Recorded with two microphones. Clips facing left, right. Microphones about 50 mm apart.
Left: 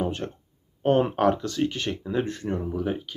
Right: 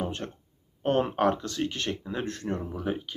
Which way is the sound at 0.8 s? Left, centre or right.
Centre.